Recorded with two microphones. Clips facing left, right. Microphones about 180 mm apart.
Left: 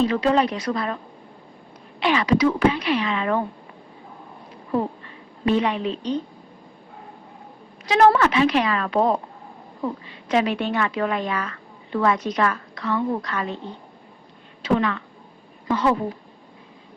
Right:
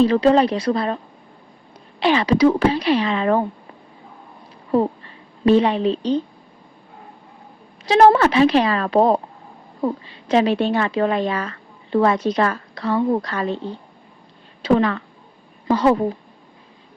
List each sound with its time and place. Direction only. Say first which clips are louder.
0.0 s a woman's voice: right 5 dB; 35° right (ahead or behind)
2.0 s a woman's voice: right 3 dB; 30° right (ahead or behind)
4.7 s a woman's voice: right 5 dB; 30° right (ahead or behind)
7.9 s a woman's voice: right 3 dB; 30° right (ahead or behind)
14.6 s a woman's voice: right 4 dB; 35° right (ahead or behind)